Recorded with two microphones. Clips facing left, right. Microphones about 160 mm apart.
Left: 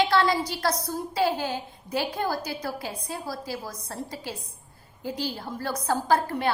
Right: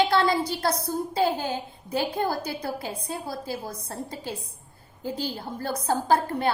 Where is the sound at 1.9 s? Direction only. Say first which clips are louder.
Right 1 dB; 30° right (ahead or behind).